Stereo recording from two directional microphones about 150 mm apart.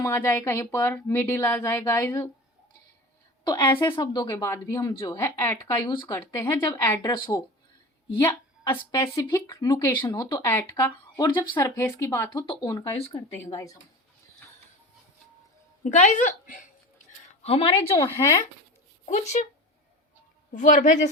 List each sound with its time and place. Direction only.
0.0 s speech: 20° left (ahead or behind)
3.4 s a woman's voice: 30° left (ahead or behind)
8.2 s a woman's voice: 15° left (ahead or behind)
8.9 s speech: 25° left (ahead or behind)
15.8 s speech: 55° left (ahead or behind)
17.4 s speech: 40° left (ahead or behind)
17.9 s speech: 20° left (ahead or behind)
19.0 s speech: 50° left (ahead or behind)
20.5 s speech: 65° left (ahead or behind)